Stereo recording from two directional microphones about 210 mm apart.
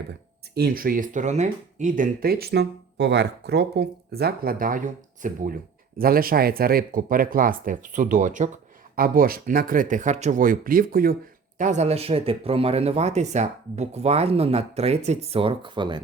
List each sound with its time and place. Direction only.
0.1 s speech: 50° right (ahead or behind); by 16.0 s 20° right (ahead or behind)